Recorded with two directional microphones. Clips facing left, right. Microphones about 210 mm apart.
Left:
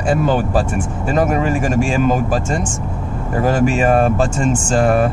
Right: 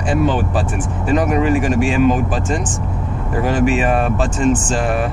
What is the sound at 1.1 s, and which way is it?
Speech, 45° left (ahead or behind).